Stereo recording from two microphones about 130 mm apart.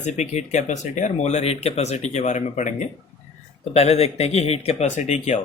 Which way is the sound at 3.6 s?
55° left (ahead or behind).